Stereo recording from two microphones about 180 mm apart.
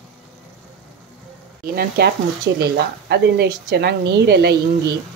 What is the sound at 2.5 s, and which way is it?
A woman's voice, 70° right (ahead or behind).